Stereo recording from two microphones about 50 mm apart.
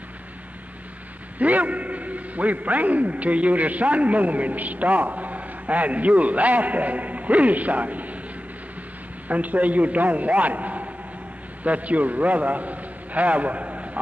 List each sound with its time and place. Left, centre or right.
1.4 s a man's voice: right
9.3 s a man's voice: right